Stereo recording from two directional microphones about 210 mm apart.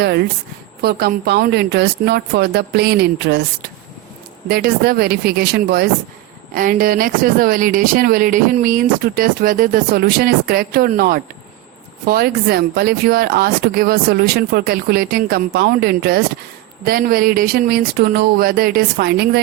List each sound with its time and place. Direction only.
0.8 s speech: 50° right (ahead or behind)
4.4 s speech: 45° right (ahead or behind)